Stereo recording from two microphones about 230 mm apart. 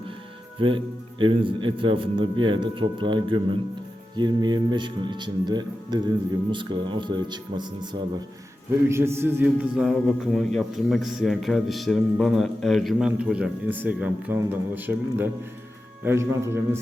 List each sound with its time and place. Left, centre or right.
0.6 s a man's voice: right